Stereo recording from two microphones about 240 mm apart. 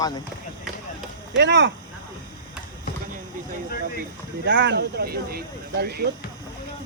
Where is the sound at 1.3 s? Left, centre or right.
Right.